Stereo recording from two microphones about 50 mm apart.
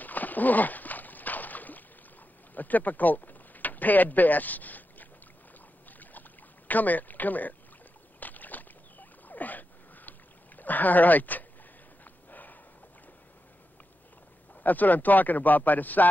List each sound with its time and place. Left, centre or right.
0.0 s a sound: left
2.5 s speech: left
5.9 s boat: left
6.7 s speech: left
8.2 s a sound: left
14.5 s speech: left